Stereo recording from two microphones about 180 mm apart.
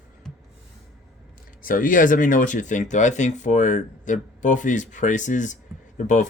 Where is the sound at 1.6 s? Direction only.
50° left (ahead or behind).